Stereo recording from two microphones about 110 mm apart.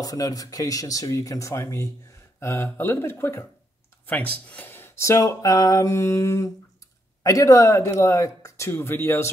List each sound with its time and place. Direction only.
0.0 s speech: 35° left (ahead or behind)